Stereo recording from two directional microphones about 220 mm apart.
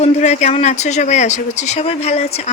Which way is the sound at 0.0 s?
30° left (ahead or behind).